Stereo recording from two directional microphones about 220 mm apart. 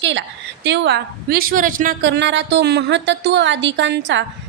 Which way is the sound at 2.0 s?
55° right (ahead or behind).